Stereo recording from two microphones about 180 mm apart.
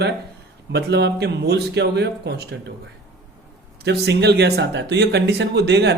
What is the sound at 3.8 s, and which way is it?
Speech, 70° right (ahead or behind).